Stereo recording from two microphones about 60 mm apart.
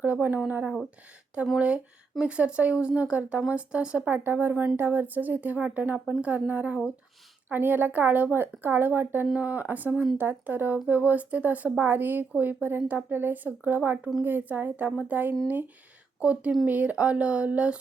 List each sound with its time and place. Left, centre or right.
0.0 s a woman's voice: right
4.1 s a woman's voice: right
16.2 s speech: centre